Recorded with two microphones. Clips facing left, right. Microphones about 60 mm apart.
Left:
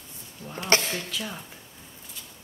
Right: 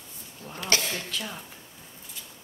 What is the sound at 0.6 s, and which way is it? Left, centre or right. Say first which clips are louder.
Speech: left 3 dB; left.